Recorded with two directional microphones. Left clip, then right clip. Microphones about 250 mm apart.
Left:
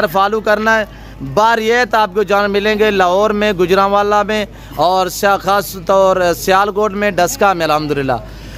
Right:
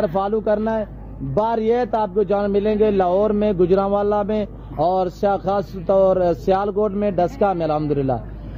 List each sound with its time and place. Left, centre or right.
0.0 s speech: left
0.5 s speech: centre